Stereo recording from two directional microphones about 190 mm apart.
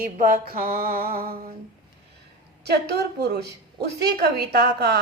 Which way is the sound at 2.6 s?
60° right (ahead or behind).